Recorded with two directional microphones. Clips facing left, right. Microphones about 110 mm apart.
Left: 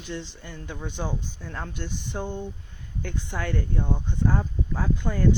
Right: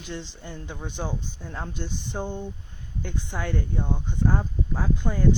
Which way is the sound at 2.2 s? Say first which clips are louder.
Even; centre (ahead or behind).